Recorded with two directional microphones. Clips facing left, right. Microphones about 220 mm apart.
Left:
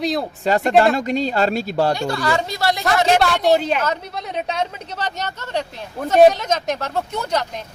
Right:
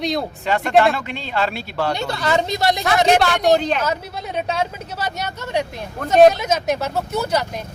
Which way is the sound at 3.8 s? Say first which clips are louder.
Even; 5° right (ahead or behind).